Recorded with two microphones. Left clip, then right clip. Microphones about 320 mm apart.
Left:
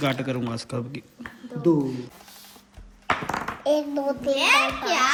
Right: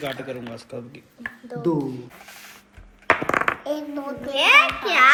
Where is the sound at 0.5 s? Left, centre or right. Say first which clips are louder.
Left 3 dB; left.